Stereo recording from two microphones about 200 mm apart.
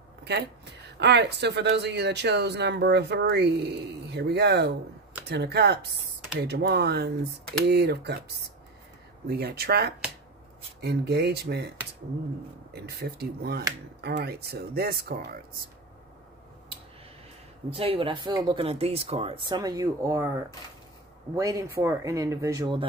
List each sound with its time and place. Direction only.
0.2 s a sound: 55° right (ahead or behind)
0.9 s speech: 60° right (ahead or behind)
9.3 s speech: 50° right (ahead or behind)
12.8 s speech: 55° right (ahead or behind)
17.6 s speech: 30° right (ahead or behind)
21.4 s speech: 15° right (ahead or behind)